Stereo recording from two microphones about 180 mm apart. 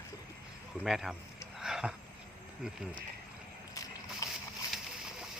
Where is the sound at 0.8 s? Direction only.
Centre (ahead or behind).